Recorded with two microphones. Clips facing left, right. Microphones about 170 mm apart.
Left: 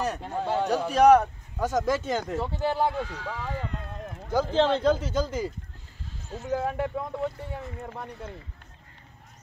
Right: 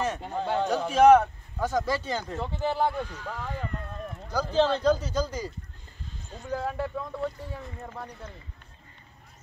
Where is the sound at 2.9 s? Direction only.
85° left.